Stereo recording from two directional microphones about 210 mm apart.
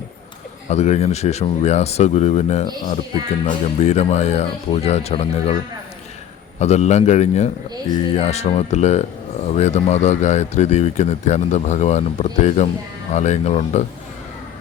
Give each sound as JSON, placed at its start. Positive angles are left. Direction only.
{"t": 0.7, "sound": "speech", "side_deg": 30}
{"t": 6.6, "sound": "speech", "side_deg": 30}